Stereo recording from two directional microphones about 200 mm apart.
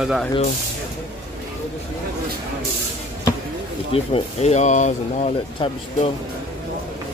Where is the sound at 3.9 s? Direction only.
30° left (ahead or behind).